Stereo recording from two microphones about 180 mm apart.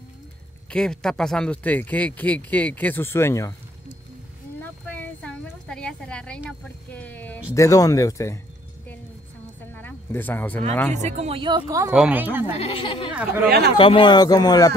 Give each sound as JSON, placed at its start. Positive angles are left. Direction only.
{"t": 0.7, "sound": "speech", "side_deg": 5}
{"t": 4.8, "sound": "a sound", "side_deg": 10}
{"t": 7.5, "sound": "speech", "side_deg": 15}
{"t": 9.8, "sound": "a sound", "side_deg": 10}
{"t": 10.9, "sound": "speech", "side_deg": -40}
{"t": 11.9, "sound": "a woman's voice", "side_deg": -5}
{"t": 12.5, "sound": "speech", "side_deg": 30}
{"t": 13.1, "sound": "a woman's voice", "side_deg": -5}
{"t": 13.5, "sound": "speech", "side_deg": -65}
{"t": 13.7, "sound": "speech", "side_deg": 30}